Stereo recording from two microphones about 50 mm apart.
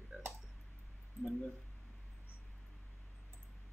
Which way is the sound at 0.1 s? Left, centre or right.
Centre.